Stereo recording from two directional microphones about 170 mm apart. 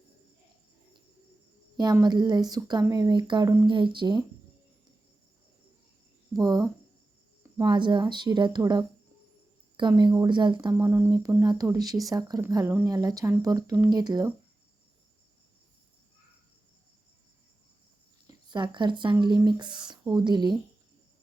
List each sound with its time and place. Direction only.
1.7 s a woman's voice: 25° right (ahead or behind)
6.3 s speech: 20° right (ahead or behind)
18.3 s speech: 25° right (ahead or behind)